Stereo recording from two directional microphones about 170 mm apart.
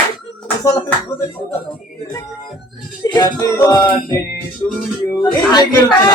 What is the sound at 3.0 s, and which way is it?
Speech, 25° left (ahead or behind).